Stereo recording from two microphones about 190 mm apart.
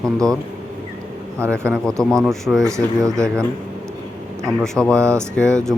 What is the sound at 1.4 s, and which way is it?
Speech, 15° right (ahead or behind).